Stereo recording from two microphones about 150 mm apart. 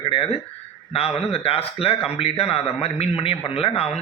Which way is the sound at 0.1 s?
40° left (ahead or behind).